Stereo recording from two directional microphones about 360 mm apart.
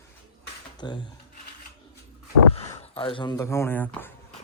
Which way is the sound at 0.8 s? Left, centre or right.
Centre.